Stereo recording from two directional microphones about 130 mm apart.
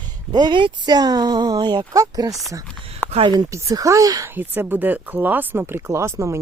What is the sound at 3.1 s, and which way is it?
Speech, 45° right (ahead or behind).